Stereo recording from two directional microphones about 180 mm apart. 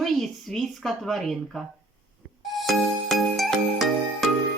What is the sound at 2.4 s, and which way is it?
Music, centre (ahead or behind).